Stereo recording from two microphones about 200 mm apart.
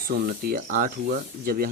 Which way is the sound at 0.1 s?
50° right (ahead or behind).